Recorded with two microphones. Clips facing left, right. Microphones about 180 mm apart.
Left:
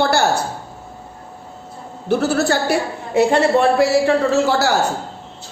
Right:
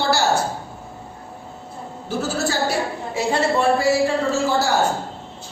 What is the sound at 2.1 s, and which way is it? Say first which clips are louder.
A woman's voice: left 7 dB; 65° left (ahead or behind).